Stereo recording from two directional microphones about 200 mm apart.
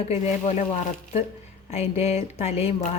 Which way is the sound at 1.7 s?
30° left (ahead or behind).